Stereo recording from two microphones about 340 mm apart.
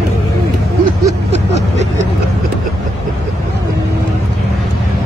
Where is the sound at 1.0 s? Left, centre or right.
Centre.